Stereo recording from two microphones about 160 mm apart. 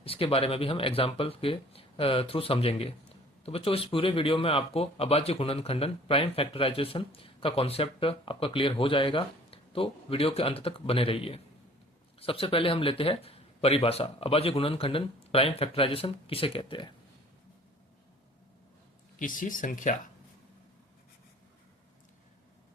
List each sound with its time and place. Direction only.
0.0 s speech: 35° left (ahead or behind)
19.2 s speech: 55° left (ahead or behind)